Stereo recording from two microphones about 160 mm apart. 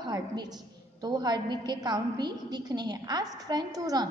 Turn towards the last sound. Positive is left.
turn(degrees=-25)  # may be behind; listen again after turning